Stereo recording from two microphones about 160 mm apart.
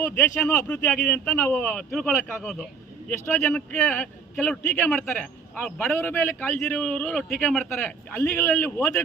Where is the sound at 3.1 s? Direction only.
15° left (ahead or behind).